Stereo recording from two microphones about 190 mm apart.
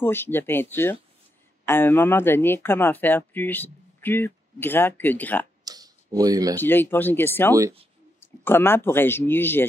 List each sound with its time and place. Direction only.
0.0 s speech: 10° left (ahead or behind)
5.7 s tick-tock: 20° right (ahead or behind)
6.5 s speech: 10° left (ahead or behind)